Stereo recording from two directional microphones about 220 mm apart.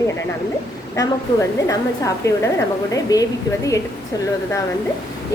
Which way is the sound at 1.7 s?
15° left (ahead or behind).